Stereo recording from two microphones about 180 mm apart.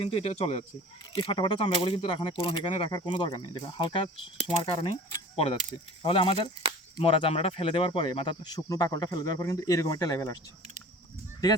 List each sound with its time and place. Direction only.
0.0 s speech: 30° left (ahead or behind)
6.0 s speech: 30° left (ahead or behind)